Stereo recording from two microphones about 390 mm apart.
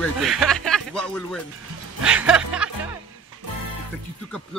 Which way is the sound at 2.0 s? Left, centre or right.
Centre.